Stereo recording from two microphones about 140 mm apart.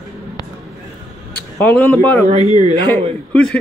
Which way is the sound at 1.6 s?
10° left (ahead or behind).